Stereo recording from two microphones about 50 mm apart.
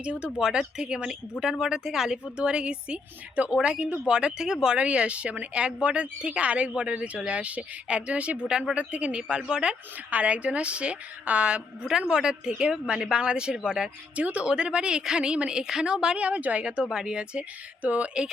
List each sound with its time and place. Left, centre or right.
0.0 s speech: right
0.3 s speech: centre
10.1 s speech: right
11.9 s speech: centre
14.2 s speech: right
16.8 s speech: centre
17.8 s speech: right